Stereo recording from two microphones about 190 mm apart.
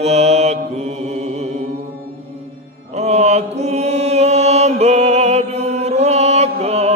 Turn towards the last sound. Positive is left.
turn(degrees=-35)  # may be behind; listen again after turning